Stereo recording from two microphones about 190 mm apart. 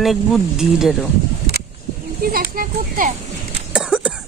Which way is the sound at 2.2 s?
50° right (ahead or behind).